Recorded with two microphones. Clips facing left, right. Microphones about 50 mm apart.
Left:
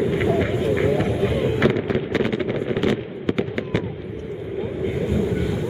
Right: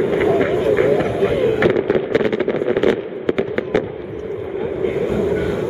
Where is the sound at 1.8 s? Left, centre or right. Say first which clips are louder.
Right 6 dB; centre.